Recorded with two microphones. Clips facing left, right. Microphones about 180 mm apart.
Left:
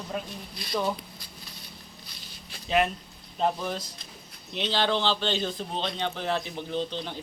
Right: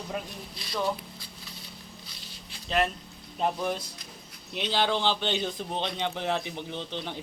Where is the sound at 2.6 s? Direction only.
5° left (ahead or behind).